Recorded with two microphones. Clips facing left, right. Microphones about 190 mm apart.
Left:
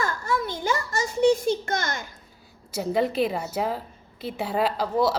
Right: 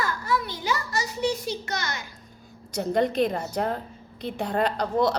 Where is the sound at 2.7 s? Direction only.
5° left (ahead or behind).